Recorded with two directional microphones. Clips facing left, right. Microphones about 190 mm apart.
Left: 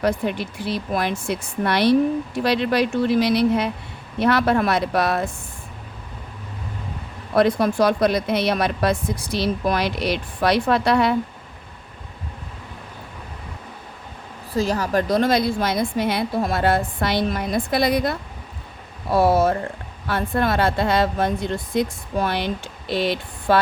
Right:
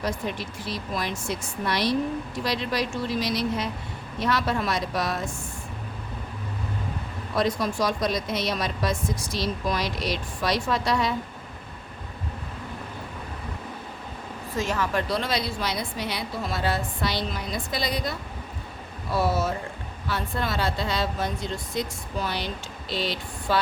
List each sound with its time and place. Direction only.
0.0 s a woman's voice: 60° left (ahead or behind)
7.3 s a woman's voice: 60° left (ahead or behind)
14.5 s a woman's voice: 35° left (ahead or behind); by 23.6 s 60° left (ahead or behind)